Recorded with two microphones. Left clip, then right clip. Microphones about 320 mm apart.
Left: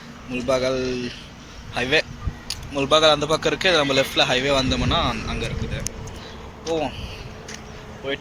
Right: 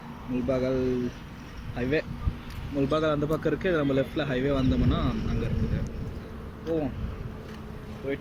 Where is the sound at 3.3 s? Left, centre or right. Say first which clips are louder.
Left 8 dB; left.